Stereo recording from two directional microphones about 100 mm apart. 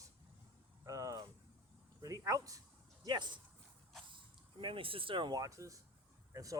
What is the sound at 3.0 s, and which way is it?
Speech, 50° right (ahead or behind).